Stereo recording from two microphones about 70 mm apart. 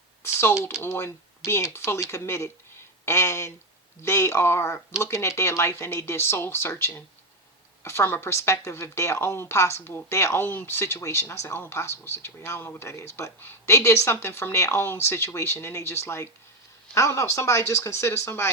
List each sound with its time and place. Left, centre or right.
0.3 s typing: left
0.8 s speech: left
10.4 s speech: left